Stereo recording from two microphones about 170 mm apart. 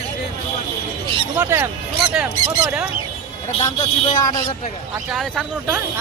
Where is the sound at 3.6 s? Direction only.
25° left (ahead or behind).